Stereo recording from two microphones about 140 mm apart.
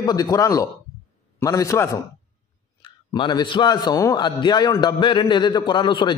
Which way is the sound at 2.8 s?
35° left (ahead or behind).